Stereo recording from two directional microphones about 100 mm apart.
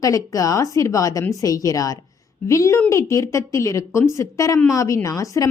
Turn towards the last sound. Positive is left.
turn(degrees=35)  # may be behind; listen again after turning